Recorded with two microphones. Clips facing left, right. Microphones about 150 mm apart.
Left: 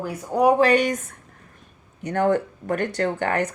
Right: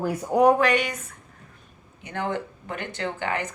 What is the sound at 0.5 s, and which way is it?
Speech, 35° left (ahead or behind).